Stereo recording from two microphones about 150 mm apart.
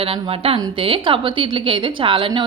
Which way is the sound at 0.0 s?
40° right (ahead or behind).